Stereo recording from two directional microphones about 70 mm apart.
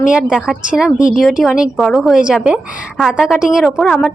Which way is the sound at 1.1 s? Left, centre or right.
Centre.